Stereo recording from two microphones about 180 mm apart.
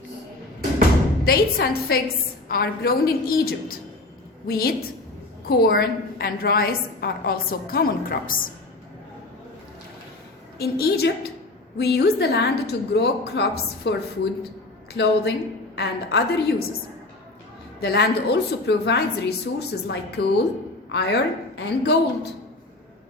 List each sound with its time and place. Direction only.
1.2 s a woman's voice: 55° left (ahead or behind)
10.6 s a woman's voice: 60° left (ahead or behind)
14.9 s a woman's voice: 65° left (ahead or behind)
17.7 s a woman's voice: 65° left (ahead or behind)